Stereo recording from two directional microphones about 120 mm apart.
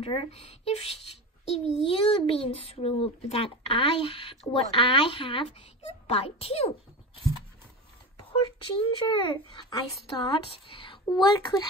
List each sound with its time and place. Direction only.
0.0 s a child's voice: 50° left (ahead or behind)
8.8 s a woman's voice: 40° left (ahead or behind)